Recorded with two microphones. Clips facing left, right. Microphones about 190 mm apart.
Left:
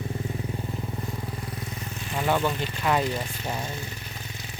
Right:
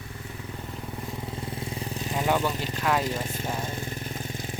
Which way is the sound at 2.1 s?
15° right (ahead or behind).